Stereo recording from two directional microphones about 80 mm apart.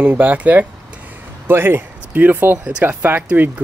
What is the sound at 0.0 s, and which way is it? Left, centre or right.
Speech, right.